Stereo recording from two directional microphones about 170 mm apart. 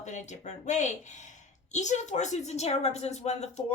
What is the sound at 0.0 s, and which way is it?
A woman's voice, 45° left (ahead or behind).